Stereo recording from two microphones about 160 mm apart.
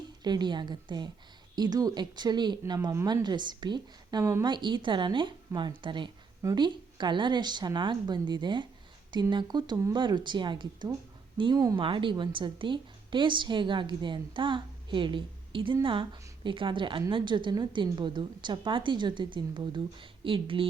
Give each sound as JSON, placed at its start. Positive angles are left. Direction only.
{"t": 0.2, "sound": "speech", "side_deg": -25}
{"t": 11.8, "sound": "a woman's voice", "side_deg": -30}